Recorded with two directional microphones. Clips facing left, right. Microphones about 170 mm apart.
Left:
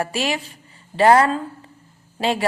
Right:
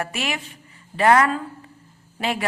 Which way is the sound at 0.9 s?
30° left (ahead or behind).